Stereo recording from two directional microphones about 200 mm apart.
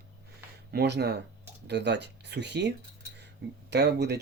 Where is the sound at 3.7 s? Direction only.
55° right (ahead or behind).